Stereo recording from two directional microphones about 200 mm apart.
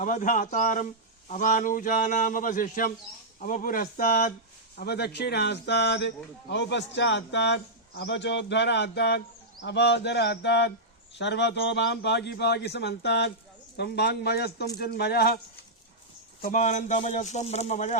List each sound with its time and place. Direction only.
0.0 s a man's voice: 40° left (ahead or behind)
16.4 s speech: 40° left (ahead or behind)